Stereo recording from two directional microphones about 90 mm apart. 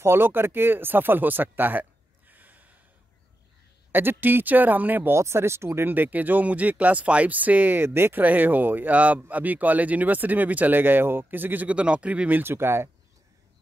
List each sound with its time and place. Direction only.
0.0 s speech: 25° right (ahead or behind)
3.9 s speech: 25° right (ahead or behind)